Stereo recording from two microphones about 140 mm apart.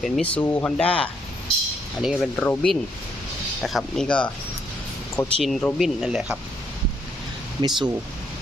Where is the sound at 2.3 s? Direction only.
10° left (ahead or behind).